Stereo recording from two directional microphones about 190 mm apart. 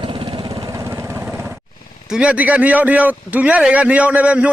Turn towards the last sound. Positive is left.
turn(degrees=-5)  # may be behind; listen again after turning